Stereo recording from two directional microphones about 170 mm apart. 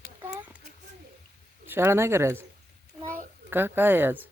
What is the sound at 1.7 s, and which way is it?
Speech, 15° right (ahead or behind).